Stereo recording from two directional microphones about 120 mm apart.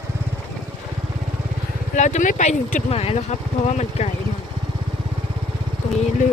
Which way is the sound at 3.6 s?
65° left (ahead or behind).